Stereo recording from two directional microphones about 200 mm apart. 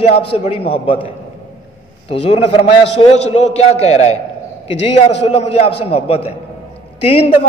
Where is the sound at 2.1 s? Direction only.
30° left (ahead or behind).